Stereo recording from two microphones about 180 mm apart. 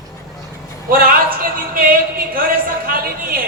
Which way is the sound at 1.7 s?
50° right (ahead or behind).